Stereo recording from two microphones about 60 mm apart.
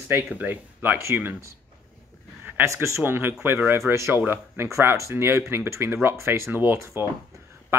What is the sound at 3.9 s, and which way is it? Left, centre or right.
Speech, right.